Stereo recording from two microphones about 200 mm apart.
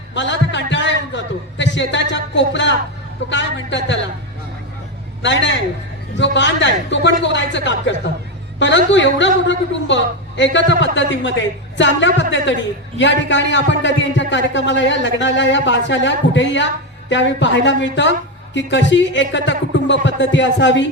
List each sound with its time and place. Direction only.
0.1 s a man's voice: 65° left (ahead or behind)
5.2 s a woman's voice: 65° left (ahead or behind)